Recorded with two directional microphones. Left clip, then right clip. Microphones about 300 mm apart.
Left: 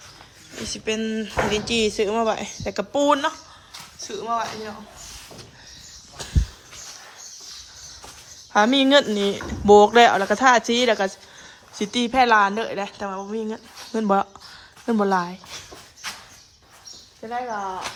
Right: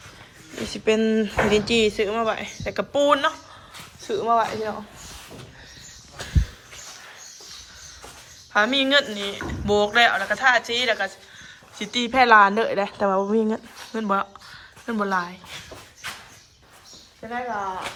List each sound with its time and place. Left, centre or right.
0.7 s speech: centre
6.1 s a sound: centre
8.5 s speech: centre
17.2 s speech: centre